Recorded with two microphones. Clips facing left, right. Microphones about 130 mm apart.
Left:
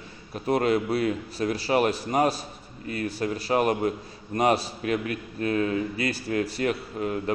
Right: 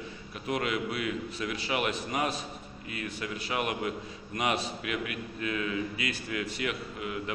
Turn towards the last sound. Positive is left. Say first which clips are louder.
# left 7 dB
turn(degrees=40)  # may be behind; listen again after turning